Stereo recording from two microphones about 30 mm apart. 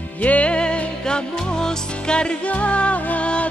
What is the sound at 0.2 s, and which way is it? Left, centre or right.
Music, left.